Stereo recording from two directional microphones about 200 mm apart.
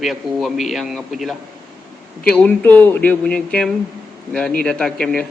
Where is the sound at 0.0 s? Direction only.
Centre (ahead or behind).